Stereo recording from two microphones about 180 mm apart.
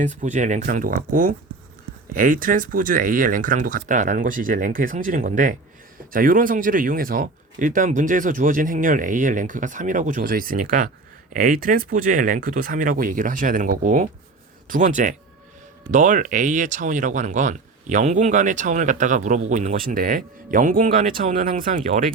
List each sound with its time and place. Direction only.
0.0 s speech: 45° right (ahead or behind)